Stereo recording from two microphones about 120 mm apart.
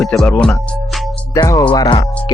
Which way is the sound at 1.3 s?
25° left (ahead or behind).